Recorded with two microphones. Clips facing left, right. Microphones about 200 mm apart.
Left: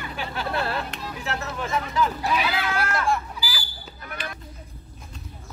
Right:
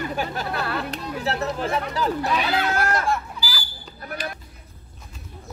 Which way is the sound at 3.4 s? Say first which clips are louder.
Right 1 dB; 40° right (ahead or behind).